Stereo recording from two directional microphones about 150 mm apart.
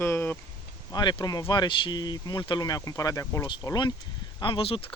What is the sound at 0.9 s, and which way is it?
Speech, 25° left (ahead or behind).